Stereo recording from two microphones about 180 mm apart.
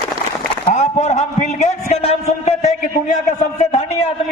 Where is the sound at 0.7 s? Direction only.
40° left (ahead or behind).